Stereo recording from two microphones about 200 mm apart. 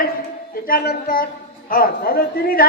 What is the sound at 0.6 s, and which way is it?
A man's voice, 50° left (ahead or behind).